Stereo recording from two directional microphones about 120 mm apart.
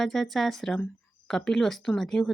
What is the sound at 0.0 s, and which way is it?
A woman's voice, 5° left (ahead or behind).